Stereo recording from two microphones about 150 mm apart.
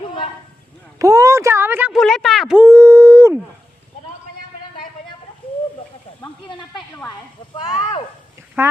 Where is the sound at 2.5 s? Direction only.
15° right (ahead or behind).